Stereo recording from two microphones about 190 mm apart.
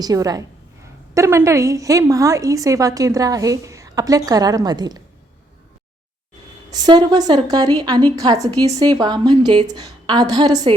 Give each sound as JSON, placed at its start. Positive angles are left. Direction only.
{"t": 0.0, "sound": "a woman's voice", "side_deg": -20}
{"t": 6.7, "sound": "a woman's voice", "side_deg": -20}